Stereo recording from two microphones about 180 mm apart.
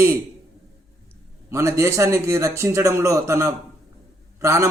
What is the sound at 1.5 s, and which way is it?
A man's voice, 15° right (ahead or behind).